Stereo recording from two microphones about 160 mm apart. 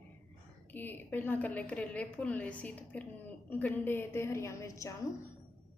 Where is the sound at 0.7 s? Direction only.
10° left (ahead or behind).